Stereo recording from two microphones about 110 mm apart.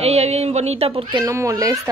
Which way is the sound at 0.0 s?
75° right (ahead or behind).